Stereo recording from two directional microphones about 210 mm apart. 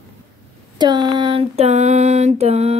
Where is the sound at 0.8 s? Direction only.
20° right (ahead or behind).